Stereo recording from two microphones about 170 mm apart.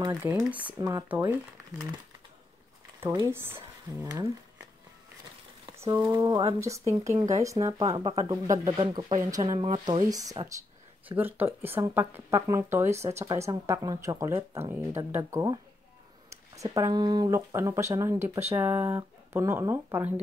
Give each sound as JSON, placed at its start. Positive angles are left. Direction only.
{"t": 0.1, "sound": "speech", "side_deg": -10}
{"t": 0.7, "sound": "speech", "side_deg": -20}
{"t": 3.0, "sound": "speech", "side_deg": -15}
{"t": 5.8, "sound": "speech", "side_deg": -15}
{"t": 7.8, "sound": "speech", "side_deg": -35}
{"t": 11.1, "sound": "speech", "side_deg": -10}